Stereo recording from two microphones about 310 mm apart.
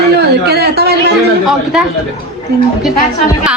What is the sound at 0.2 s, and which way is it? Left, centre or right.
Speech, right.